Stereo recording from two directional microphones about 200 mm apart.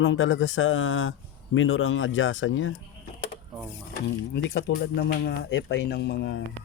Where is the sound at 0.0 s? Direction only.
70° left (ahead or behind).